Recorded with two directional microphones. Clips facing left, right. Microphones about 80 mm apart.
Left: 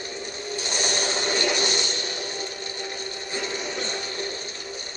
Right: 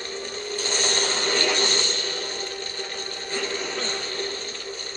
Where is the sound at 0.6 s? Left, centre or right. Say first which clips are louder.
Right 1 dB; centre.